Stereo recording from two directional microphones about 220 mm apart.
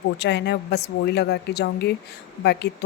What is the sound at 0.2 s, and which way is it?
Speech, 50° left (ahead or behind).